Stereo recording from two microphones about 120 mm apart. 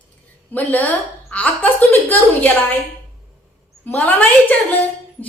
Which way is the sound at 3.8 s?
15° left (ahead or behind).